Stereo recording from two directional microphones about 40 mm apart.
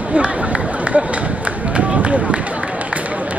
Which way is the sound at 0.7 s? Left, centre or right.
Right.